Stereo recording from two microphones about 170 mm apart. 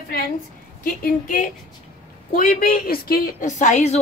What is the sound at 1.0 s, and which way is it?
A woman's voice, 50° left (ahead or behind).